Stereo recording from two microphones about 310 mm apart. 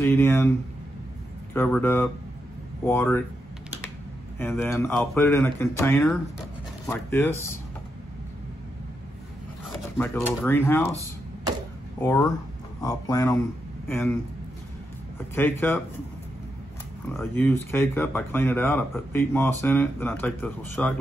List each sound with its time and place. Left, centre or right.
0.0 s speech: centre
1.5 s speech: centre
4.4 s speech: centre
9.9 s speech: centre
12.0 s speech: centre
15.3 s speech: centre
17.2 s speech: centre